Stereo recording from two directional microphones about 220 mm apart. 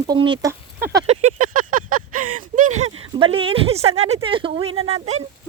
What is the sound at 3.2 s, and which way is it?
Speech, 25° right (ahead or behind).